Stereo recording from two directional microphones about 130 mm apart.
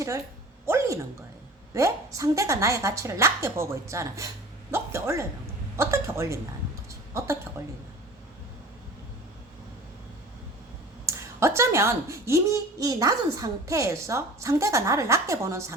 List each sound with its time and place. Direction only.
0.6 s a sound: 20° right (ahead or behind)
1.7 s speech: 25° right (ahead or behind)
7.6 s speech: 20° right (ahead or behind)
11.0 s speech: 20° right (ahead or behind)